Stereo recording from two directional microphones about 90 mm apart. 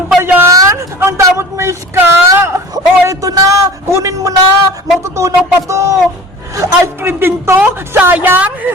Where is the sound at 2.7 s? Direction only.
40° right (ahead or behind).